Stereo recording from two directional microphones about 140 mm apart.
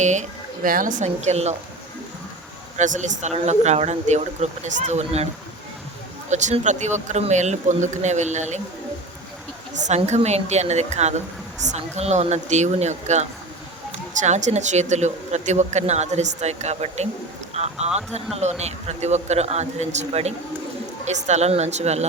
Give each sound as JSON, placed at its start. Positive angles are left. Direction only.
{"t": 0.0, "sound": "speech", "side_deg": -60}
{"t": 2.7, "sound": "speech", "side_deg": -60}
{"t": 6.3, "sound": "speech", "side_deg": -55}
{"t": 9.8, "sound": "a man's voice", "side_deg": -55}